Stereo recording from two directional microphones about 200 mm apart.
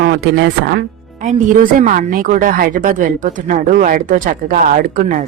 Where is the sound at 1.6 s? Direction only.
40° right (ahead or behind).